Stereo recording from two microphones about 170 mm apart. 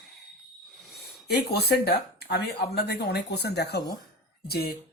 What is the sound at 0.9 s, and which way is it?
Speech, 75° left (ahead or behind).